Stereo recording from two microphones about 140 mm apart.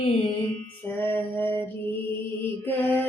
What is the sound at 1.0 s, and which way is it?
Mantra, 15° left (ahead or behind).